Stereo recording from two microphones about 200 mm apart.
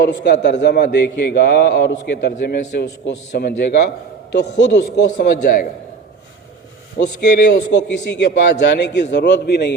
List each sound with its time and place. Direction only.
0.1 s a man's voice: 60° left (ahead or behind)
5.1 s a man's voice: 45° left (ahead or behind)
7.2 s a man's voice: 60° left (ahead or behind)